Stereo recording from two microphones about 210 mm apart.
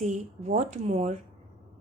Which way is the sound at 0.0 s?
35° right (ahead or behind).